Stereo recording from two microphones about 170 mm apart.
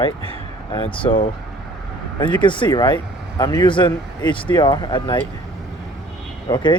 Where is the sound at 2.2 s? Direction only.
30° left (ahead or behind).